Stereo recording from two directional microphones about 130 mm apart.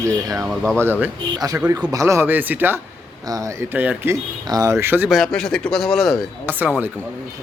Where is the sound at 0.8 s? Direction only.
15° right (ahead or behind).